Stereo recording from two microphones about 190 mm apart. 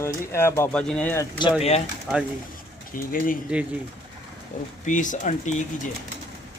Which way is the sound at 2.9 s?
45° left (ahead or behind).